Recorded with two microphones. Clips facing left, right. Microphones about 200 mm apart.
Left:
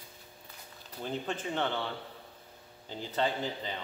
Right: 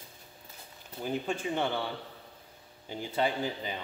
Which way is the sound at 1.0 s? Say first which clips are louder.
Right 3 dB; 10° right (ahead or behind).